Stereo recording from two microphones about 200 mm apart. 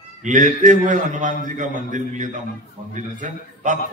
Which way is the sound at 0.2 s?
40° right (ahead or behind).